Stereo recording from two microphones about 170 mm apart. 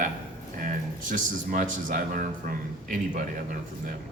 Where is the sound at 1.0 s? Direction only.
50° right (ahead or behind).